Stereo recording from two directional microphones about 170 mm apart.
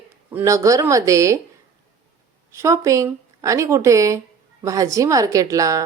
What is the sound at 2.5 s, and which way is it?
A woman's voice, 15° right (ahead or behind).